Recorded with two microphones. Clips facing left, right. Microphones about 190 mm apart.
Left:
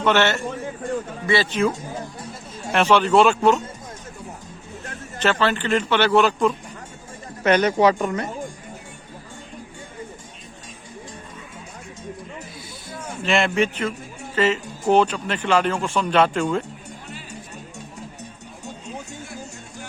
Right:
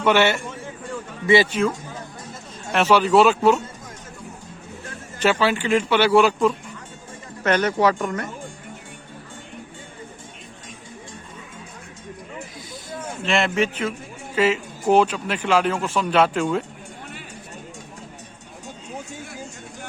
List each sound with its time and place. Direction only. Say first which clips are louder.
0.0 s a man's voice: right 1 dB; 10° right (ahead or behind)
1.6 s a man's voice: left 1 dB; 5° right (ahead or behind)
2.7 s a man's voice: even; 5° right (ahead or behind)
5.2 s a man's voice: right 1 dB; 10° right (ahead or behind)
7.4 s speech: left 2 dB; 15° left (ahead or behind)
13.2 s a man's voice: left 1 dB; centre (ahead or behind)